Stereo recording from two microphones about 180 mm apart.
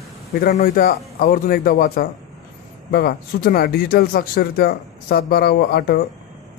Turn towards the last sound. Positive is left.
turn(degrees=60)  # may be behind; listen again after turning